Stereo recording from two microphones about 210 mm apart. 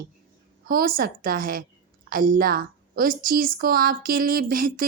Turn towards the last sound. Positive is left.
turn(degrees=-40)  # may be behind; listen again after turning